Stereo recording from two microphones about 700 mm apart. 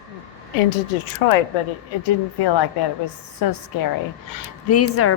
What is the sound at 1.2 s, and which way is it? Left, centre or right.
Speech, left.